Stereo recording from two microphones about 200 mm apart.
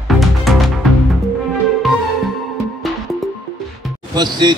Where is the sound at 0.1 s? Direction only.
Centre (ahead or behind).